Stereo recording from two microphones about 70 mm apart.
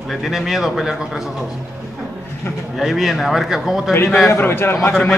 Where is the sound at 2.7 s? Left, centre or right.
Centre.